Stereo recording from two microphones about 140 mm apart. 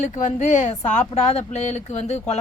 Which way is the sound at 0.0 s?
60° left (ahead or behind).